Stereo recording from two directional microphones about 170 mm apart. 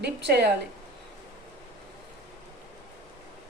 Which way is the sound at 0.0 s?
80° right.